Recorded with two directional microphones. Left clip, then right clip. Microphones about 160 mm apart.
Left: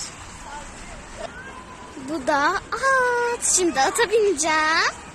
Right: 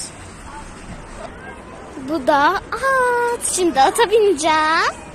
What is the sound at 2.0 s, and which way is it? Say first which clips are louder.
A woman's voice: right 6 dB; 15° left (ahead or behind).